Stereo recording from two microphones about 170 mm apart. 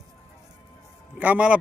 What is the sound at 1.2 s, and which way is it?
Speech, 10° right (ahead or behind).